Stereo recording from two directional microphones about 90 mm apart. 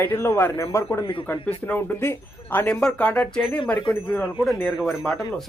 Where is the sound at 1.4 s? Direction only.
20° left (ahead or behind).